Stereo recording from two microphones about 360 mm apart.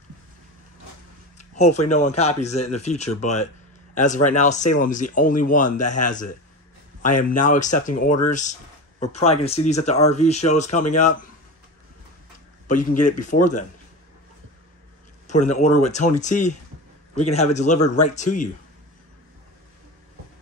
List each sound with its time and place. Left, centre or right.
1.4 s a sound: centre
1.9 s speech: centre
13.2 s speech: left
15.2 s speech: centre